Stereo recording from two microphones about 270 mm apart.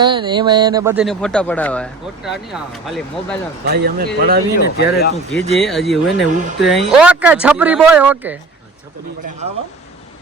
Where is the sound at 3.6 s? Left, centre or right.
Right.